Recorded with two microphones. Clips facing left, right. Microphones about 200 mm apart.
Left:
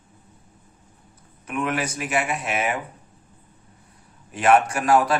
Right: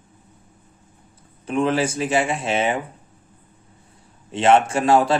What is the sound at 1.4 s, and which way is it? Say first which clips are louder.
A man's voice: right 6 dB; 30° right (ahead or behind).